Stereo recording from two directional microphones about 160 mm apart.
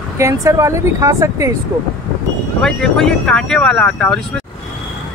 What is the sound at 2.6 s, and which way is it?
Speech, 5° left (ahead or behind).